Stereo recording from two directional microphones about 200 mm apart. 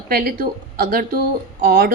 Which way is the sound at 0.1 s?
50° right (ahead or behind).